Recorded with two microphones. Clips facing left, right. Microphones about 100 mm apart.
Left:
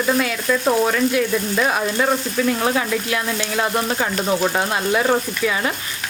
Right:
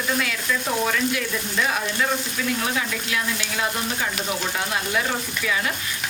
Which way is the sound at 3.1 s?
45° left (ahead or behind).